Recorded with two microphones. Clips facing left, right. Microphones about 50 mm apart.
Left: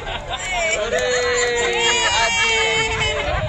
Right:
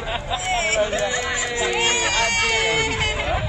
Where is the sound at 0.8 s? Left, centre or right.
Left.